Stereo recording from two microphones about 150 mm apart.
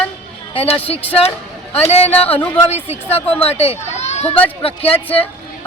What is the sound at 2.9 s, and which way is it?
Speech, 45° left (ahead or behind).